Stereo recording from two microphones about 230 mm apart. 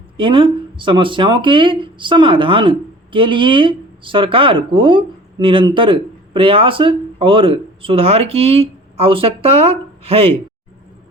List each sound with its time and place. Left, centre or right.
0.2 s speech: right